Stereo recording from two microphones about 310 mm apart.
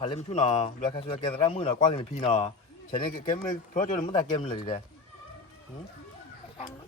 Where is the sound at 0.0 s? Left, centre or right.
Left.